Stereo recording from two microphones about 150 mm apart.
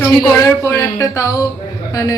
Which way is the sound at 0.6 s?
15° left (ahead or behind).